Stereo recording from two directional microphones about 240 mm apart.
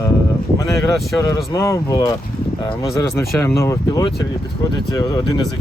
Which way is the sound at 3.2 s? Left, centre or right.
Centre.